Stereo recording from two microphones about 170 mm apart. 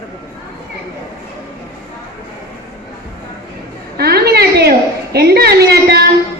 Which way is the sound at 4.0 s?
70° right (ahead or behind).